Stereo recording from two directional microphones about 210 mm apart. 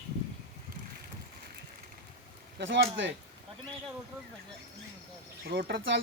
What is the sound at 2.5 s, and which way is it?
Speech, 55° right (ahead or behind).